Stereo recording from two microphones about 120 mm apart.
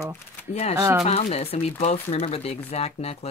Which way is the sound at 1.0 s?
55° left (ahead or behind).